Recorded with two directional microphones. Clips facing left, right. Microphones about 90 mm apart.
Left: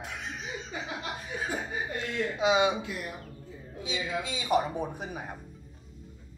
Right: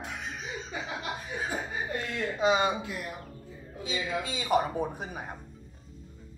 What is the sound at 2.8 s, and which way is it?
Speech, 20° right (ahead or behind).